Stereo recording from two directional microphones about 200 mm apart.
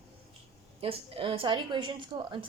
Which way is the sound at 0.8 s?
30° right (ahead or behind).